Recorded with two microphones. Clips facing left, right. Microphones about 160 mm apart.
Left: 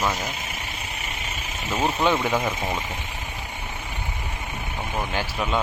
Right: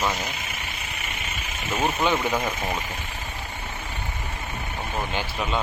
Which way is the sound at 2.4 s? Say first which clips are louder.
Left 1 dB; 20° left (ahead or behind).